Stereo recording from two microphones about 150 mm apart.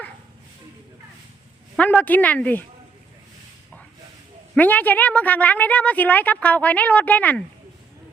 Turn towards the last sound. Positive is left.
turn(degrees=10)  # may be behind; listen again after turning